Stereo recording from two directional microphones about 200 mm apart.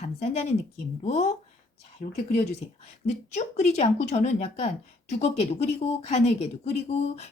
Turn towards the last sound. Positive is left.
turn(degrees=35)  # may be behind; listen again after turning